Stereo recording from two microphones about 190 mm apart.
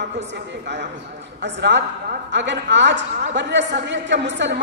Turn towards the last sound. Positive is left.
turn(degrees=-70)  # may be behind; listen again after turning